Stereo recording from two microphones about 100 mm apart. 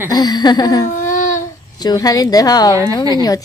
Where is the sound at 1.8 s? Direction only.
40° left (ahead or behind).